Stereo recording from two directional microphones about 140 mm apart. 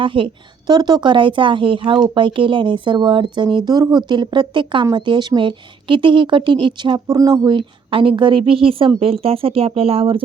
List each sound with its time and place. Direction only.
0.0 s a woman's voice: 35° right (ahead or behind)